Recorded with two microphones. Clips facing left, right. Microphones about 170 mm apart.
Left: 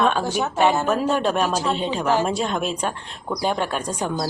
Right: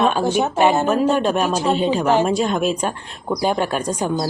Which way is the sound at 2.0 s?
20° right (ahead or behind).